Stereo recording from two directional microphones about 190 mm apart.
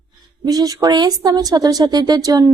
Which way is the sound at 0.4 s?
20° right (ahead or behind).